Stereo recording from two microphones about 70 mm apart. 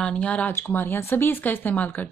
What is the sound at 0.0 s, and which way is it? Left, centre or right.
Speech, centre.